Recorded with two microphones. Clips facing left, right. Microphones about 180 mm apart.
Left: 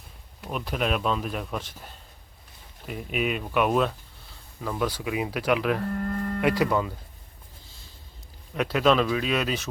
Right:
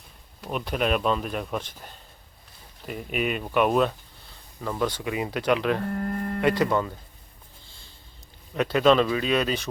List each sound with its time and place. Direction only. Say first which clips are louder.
0.4 s speech: right 2 dB; centre (ahead or behind)
5.9 s speech: even; 20° right (ahead or behind)
6.4 s speech: right 1 dB; 5° left (ahead or behind)
8.5 s speech: right 2 dB; centre (ahead or behind)